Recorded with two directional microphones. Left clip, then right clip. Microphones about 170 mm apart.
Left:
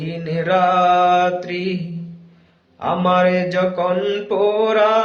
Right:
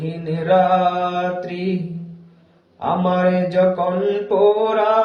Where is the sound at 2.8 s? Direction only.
35° left (ahead or behind).